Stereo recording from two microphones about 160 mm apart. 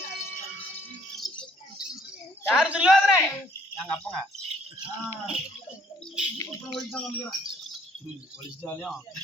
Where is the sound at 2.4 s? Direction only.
5° right (ahead or behind).